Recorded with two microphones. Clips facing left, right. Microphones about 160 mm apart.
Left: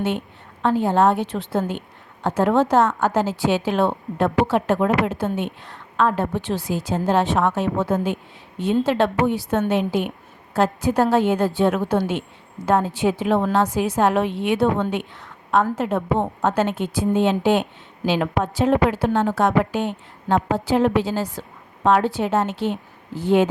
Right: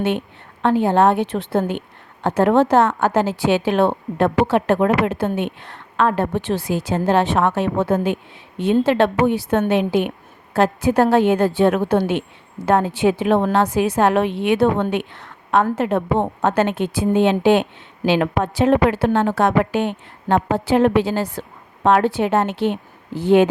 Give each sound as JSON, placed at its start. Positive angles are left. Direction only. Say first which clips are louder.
{"t": 0.6, "sound": "a woman's voice", "louder": "right 2 dB", "side_deg": -65}